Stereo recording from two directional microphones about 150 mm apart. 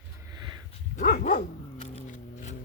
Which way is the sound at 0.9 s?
65° left (ahead or behind).